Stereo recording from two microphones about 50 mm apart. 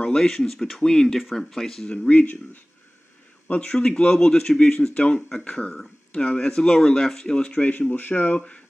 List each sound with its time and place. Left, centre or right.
0.0 s speech: centre
2.0 s speech: left
7.9 s speech: left
8.4 s speech: left